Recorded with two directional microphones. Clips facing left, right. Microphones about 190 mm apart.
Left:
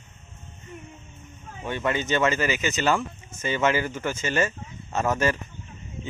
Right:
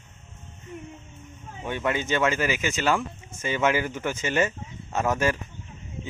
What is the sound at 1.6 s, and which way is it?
Speech, 10° right (ahead or behind).